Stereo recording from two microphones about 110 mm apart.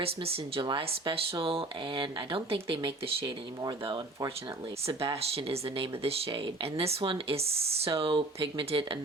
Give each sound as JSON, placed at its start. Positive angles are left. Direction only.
{"t": 0.5, "sound": "speech", "side_deg": -50}
{"t": 4.9, "sound": "speech", "side_deg": -60}